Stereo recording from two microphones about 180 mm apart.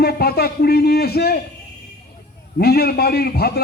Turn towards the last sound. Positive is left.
turn(degrees=60)  # may be behind; listen again after turning